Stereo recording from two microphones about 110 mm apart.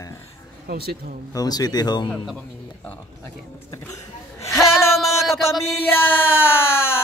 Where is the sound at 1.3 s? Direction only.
35° left (ahead or behind).